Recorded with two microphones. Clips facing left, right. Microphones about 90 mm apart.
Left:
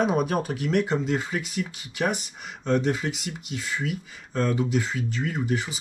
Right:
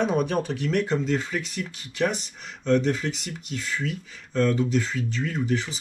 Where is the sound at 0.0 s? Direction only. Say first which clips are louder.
Even; 5° left (ahead or behind).